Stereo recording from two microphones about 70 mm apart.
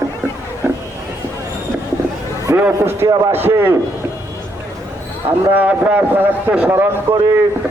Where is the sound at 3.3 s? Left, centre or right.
Right.